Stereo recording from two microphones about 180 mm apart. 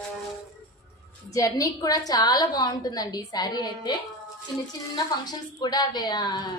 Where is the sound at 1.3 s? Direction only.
20° left (ahead or behind).